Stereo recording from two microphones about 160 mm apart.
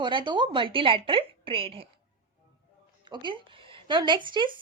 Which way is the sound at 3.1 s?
30° right (ahead or behind).